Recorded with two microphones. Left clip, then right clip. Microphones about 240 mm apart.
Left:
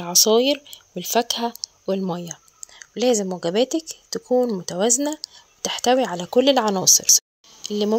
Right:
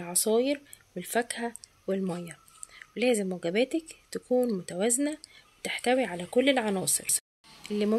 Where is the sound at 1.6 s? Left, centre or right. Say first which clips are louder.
Left 7 dB; left.